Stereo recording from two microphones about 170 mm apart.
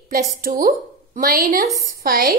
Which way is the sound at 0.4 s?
60° right (ahead or behind).